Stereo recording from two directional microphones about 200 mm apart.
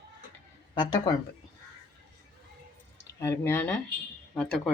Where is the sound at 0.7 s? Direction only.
20° left (ahead or behind).